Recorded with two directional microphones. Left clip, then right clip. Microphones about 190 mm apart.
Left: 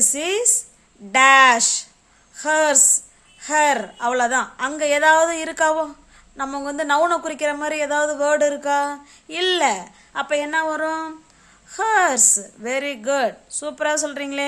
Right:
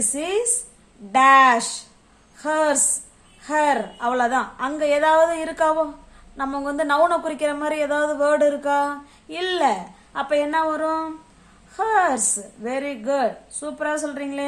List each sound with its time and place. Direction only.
0.1 s a woman's voice: 45° left (ahead or behind)